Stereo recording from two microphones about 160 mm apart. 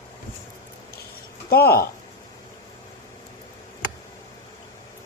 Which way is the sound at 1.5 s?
75° left (ahead or behind).